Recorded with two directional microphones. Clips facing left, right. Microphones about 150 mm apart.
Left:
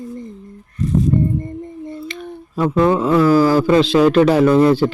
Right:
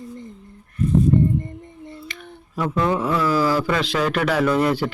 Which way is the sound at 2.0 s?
30° left (ahead or behind).